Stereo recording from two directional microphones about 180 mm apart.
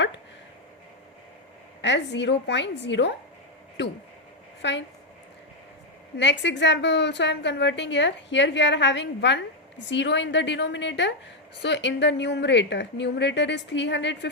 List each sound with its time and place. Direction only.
1.8 s a woman's voice: 75° left (ahead or behind)
4.6 s a woman's voice: 75° left (ahead or behind)
6.1 s a woman's voice: 80° left